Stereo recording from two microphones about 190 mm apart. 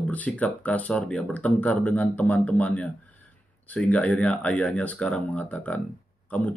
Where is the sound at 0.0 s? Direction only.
10° left (ahead or behind).